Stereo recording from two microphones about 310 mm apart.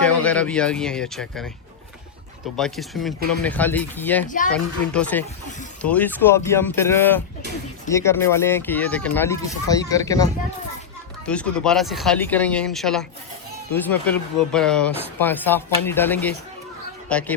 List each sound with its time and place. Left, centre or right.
0.0 s speech: centre
2.6 s speech: centre
11.3 s speech: centre